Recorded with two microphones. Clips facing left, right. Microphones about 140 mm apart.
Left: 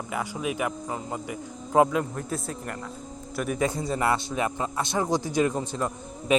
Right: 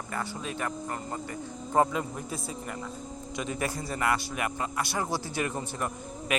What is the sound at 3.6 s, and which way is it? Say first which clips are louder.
A man's voice: left 5 dB; 20° left (ahead or behind).